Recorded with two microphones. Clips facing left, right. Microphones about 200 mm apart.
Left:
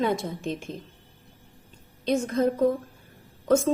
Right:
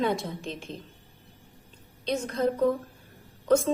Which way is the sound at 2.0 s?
45° left (ahead or behind).